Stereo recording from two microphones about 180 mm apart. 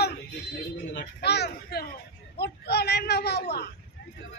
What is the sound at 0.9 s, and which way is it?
Speech, 65° left (ahead or behind).